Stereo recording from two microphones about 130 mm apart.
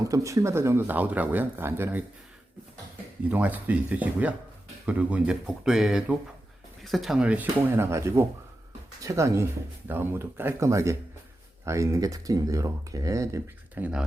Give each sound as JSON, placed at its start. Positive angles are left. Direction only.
{"t": 0.1, "sound": "speech", "side_deg": -25}
{"t": 3.2, "sound": "speech", "side_deg": -10}